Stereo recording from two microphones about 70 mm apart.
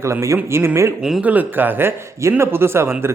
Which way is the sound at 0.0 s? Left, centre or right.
Right.